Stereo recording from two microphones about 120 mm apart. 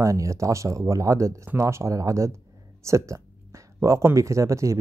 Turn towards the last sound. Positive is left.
turn(degrees=-25)  # may be behind; listen again after turning